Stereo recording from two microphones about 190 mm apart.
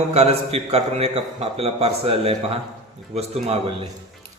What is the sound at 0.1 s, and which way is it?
A man's voice, 35° right (ahead or behind).